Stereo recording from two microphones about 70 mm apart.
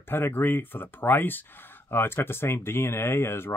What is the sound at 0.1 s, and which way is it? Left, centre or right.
Speech, left.